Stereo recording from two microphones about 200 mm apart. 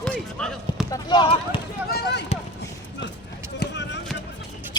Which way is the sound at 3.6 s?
60° left (ahead or behind).